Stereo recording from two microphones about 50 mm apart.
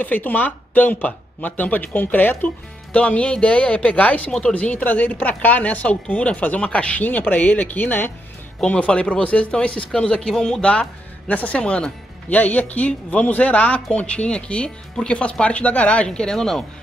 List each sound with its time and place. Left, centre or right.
0.0 s speech: left
4.3 s speech: centre
4.6 s speech: left
8.6 s speech: left
12.4 s speech: left
16.1 s speech: centre